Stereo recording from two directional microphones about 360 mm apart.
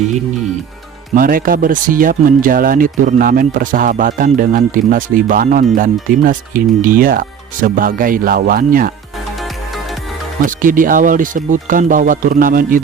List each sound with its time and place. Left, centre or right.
1.1 s speech: right
10.4 s speech: right